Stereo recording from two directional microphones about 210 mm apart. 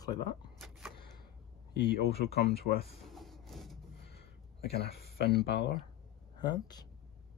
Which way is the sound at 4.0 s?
50° left (ahead or behind).